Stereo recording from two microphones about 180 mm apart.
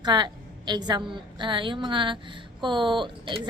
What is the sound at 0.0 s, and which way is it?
A woman's voice, 25° right (ahead or behind).